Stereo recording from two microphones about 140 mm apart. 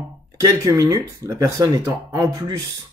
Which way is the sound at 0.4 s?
25° right (ahead or behind).